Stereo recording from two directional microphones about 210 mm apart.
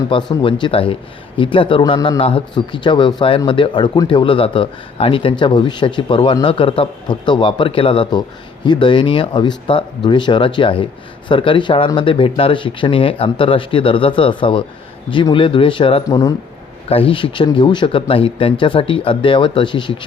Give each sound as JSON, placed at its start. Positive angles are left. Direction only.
{"t": 0.1, "sound": "speech", "side_deg": 25}